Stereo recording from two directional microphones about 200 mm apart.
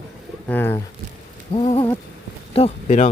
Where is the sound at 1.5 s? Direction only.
25° left (ahead or behind).